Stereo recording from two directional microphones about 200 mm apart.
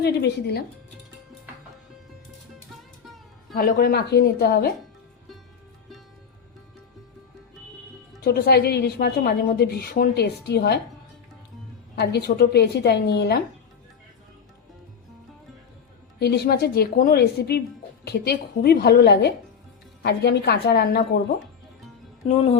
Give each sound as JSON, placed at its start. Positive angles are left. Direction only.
{"t": 0.0, "sound": "a woman's voice", "side_deg": 55}
{"t": 3.5, "sound": "a woman's voice", "side_deg": 50}
{"t": 8.2, "sound": "a woman's voice", "side_deg": 50}
{"t": 11.9, "sound": "a woman's voice", "side_deg": 55}
{"t": 16.2, "sound": "a woman's voice", "side_deg": 55}